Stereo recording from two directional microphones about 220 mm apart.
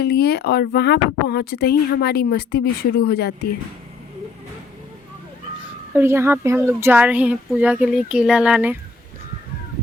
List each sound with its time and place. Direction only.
0.0 s speech: 45° left (ahead or behind)
5.9 s speech: 10° right (ahead or behind)